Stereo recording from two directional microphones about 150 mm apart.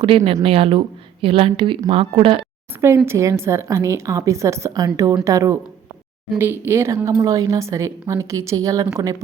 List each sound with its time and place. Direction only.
0.0 s speech: 35° right (ahead or behind)
3.1 s a woman's voice: 20° right (ahead or behind)